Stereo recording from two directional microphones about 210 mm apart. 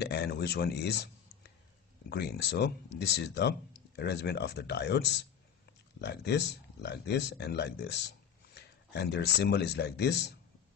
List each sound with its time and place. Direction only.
0.0 s speech: 50° left (ahead or behind)